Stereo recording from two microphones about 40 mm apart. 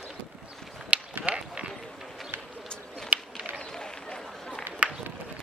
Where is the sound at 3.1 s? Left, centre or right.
Right.